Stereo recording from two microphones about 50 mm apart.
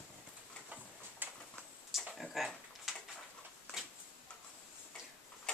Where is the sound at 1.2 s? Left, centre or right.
Right.